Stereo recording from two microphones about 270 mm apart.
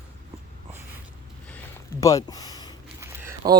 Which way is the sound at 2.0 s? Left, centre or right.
Centre.